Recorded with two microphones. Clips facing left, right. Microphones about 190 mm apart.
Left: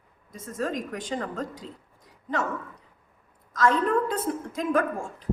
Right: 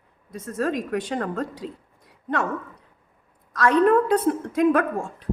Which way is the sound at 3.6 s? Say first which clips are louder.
Right 5 dB; 65° right (ahead or behind).